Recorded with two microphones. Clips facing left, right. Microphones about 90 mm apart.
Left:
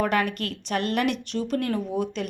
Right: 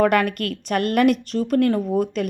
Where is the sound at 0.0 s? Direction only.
55° right (ahead or behind).